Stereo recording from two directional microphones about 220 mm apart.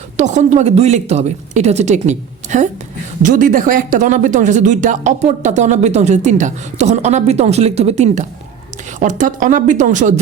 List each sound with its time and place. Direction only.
0.2 s speech: 35° right (ahead or behind)